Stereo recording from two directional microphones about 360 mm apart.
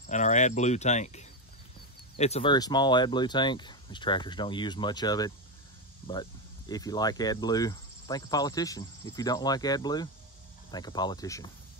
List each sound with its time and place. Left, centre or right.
0.0 s speech: centre
6.7 s speech: centre